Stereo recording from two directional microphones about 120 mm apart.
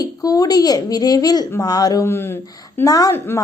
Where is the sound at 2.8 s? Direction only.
30° left (ahead or behind).